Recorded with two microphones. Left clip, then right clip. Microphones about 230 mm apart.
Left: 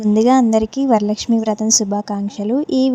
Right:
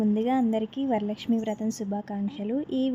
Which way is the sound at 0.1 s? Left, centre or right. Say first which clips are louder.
Left 18 dB; left.